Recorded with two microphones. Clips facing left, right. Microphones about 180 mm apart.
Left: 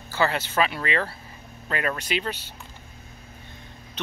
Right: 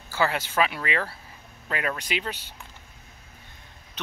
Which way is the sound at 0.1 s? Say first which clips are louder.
Left 1 dB; 10° right (ahead or behind).